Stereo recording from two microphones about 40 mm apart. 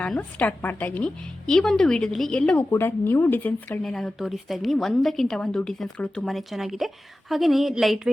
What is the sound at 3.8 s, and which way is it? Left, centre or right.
A woman's voice, centre.